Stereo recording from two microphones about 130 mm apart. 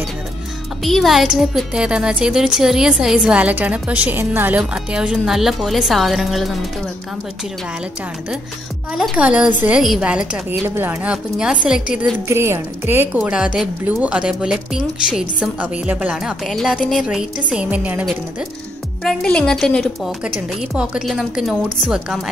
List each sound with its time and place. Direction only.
0.8 s a woman's voice: centre (ahead or behind)
8.9 s a woman's voice: 5° right (ahead or behind)
12.3 s a woman's voice: 20° right (ahead or behind)
19.0 s a woman's voice: 5° left (ahead or behind)